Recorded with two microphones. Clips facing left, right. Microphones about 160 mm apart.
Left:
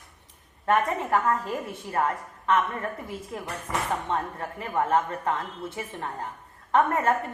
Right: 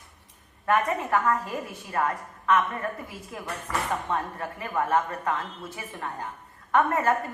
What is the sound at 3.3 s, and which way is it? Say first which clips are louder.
A woman's voice: even; 30° left (ahead or behind).